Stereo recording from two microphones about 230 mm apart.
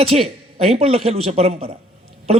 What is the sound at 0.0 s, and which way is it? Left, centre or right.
A man's voice, right.